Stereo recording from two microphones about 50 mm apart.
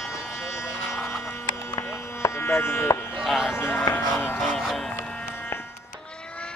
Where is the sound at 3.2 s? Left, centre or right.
Centre.